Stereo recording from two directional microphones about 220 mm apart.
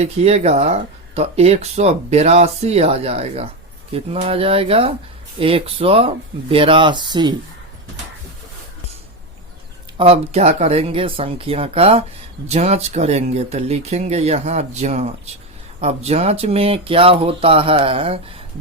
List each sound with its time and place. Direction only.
0.0 s speech: 30° right (ahead or behind)
10.0 s speech: 30° right (ahead or behind)